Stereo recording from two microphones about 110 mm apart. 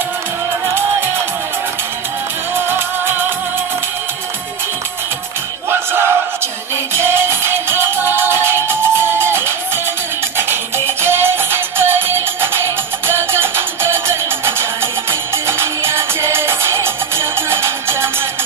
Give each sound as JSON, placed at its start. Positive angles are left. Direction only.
{"t": 5.7, "sound": "battle cry", "side_deg": -20}
{"t": 6.9, "sound": "music", "side_deg": -20}